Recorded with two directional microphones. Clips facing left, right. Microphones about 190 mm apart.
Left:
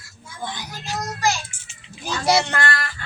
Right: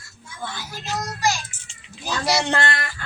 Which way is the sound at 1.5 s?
10° left (ahead or behind).